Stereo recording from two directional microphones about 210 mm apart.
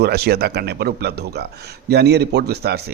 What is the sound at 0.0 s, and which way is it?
Speech, 50° right (ahead or behind).